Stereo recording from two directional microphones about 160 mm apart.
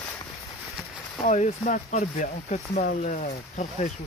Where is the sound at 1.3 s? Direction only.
50° left (ahead or behind).